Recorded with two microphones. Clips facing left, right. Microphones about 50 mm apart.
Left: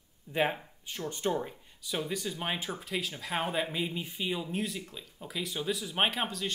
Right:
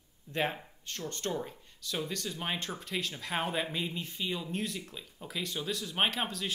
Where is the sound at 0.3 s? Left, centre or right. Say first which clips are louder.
Left 3 dB; centre.